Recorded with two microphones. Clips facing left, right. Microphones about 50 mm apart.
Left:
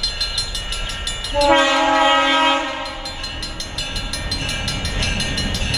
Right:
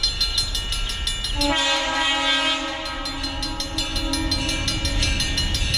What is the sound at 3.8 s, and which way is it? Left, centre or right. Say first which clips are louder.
Train: right 2 dB; centre.